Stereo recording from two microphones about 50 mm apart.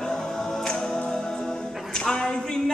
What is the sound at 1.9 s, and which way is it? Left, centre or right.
Music, centre.